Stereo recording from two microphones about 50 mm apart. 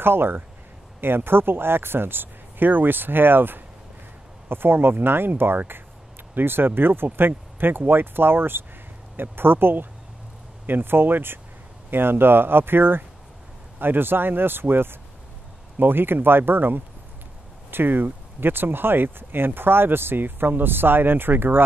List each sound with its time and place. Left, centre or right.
0.0 s speech: right